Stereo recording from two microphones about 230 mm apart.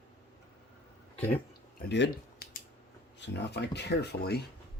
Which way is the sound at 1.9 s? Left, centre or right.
Left.